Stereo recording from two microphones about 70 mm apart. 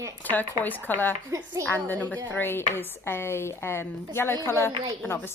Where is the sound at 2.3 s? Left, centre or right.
Left.